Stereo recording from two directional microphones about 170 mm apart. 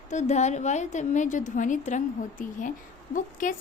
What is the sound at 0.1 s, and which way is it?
A woman's voice, 45° left (ahead or behind).